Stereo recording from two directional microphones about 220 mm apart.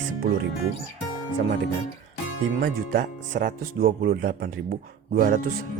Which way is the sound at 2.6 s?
35° right (ahead or behind).